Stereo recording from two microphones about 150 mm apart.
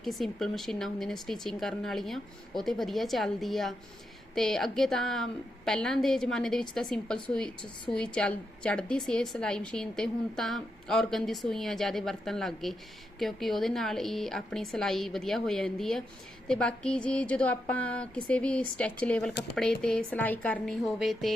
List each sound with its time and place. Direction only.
0.0 s a woman's voice: centre (ahead or behind)